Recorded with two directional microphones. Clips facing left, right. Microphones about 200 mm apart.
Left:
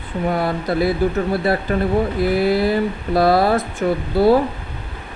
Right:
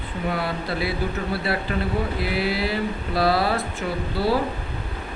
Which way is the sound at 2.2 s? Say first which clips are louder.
Left 8 dB; 45° left (ahead or behind).